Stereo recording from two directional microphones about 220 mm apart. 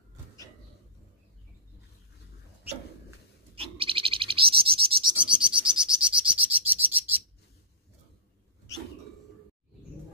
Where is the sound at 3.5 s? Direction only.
25° right (ahead or behind).